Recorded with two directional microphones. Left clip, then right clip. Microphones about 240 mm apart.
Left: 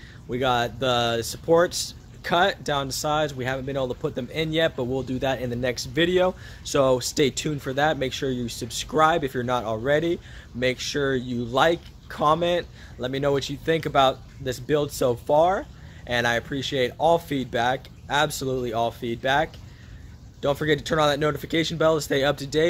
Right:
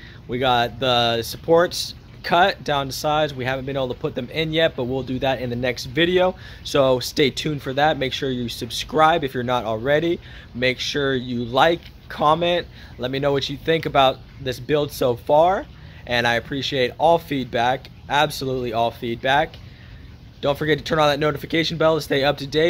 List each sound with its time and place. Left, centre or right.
0.3 s speech: centre